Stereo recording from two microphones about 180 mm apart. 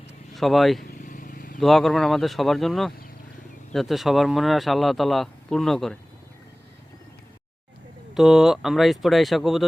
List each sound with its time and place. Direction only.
0.3 s speech: centre (ahead or behind)
0.9 s vehicle: 50° left (ahead or behind)
1.5 s speech: centre (ahead or behind)
8.1 s speech: centre (ahead or behind)